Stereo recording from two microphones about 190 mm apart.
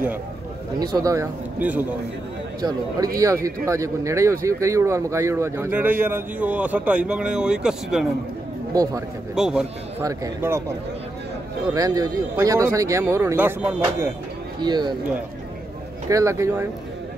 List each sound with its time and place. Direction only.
0.7 s speech: 20° right (ahead or behind)
3.6 s speech: 15° right (ahead or behind)
9.3 s speech: 5° right (ahead or behind)
10.0 s speech: 15° right (ahead or behind)
11.7 s speech: 20° right (ahead or behind)
14.6 s speech: 25° right (ahead or behind)
16.1 s speech: 15° right (ahead or behind)